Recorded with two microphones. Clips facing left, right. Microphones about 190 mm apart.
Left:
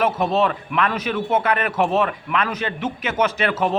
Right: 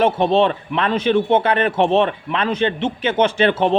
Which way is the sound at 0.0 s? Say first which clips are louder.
Right 4 dB; 30° right (ahead or behind).